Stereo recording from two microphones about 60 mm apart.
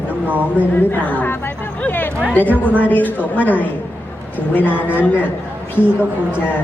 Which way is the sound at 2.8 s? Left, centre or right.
Left.